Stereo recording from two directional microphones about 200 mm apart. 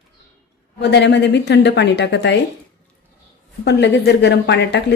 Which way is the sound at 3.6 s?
55° left (ahead or behind).